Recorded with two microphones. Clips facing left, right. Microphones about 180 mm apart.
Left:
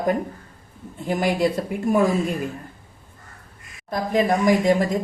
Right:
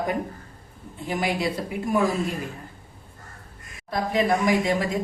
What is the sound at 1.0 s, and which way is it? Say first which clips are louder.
Speech: left 4 dB; 50° left (ahead or behind).